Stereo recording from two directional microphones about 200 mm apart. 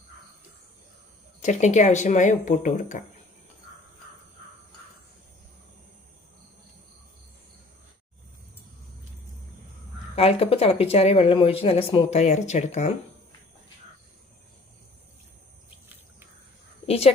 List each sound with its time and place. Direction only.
1.4 s speech: 35° left (ahead or behind)
10.1 s speech: 30° left (ahead or behind)
16.8 s a sound: 30° left (ahead or behind)